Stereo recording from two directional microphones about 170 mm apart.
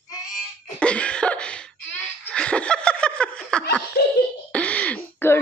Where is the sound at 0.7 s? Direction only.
5° left (ahead or behind).